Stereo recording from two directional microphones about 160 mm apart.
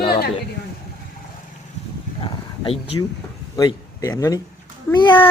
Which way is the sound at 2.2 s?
35° left (ahead or behind).